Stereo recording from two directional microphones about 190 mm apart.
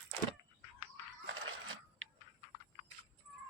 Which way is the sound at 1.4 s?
90° right.